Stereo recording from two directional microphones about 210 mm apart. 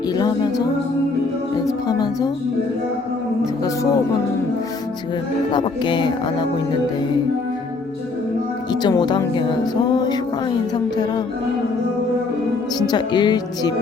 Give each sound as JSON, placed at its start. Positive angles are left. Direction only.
{"t": 0.2, "sound": "speech", "side_deg": 20}
{"t": 1.6, "sound": "music", "side_deg": 20}
{"t": 5.5, "sound": "speech", "side_deg": 20}
{"t": 8.7, "sound": "speech", "side_deg": 20}
{"t": 12.8, "sound": "speech", "side_deg": 20}